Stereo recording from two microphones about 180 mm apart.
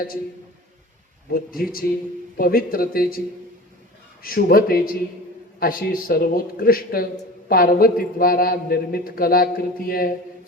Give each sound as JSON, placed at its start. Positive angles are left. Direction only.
{"t": 1.3, "sound": "a man's voice", "side_deg": 55}
{"t": 4.2, "sound": "a man's voice", "side_deg": 55}